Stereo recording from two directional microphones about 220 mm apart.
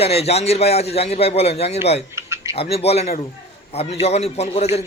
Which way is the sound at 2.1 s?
15° right (ahead or behind).